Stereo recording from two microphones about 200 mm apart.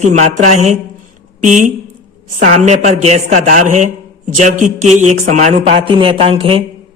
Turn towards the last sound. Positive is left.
turn(degrees=-30)  # may be behind; listen again after turning